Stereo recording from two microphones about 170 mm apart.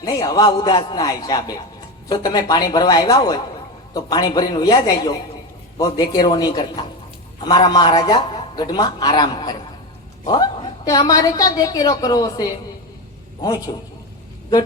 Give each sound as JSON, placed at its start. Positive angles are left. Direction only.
{"t": 0.0, "sound": "a woman's voice", "side_deg": 20}
{"t": 13.7, "sound": "a woman's voice", "side_deg": 30}